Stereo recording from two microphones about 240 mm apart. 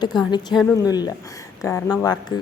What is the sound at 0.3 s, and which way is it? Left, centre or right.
A woman's voice, centre.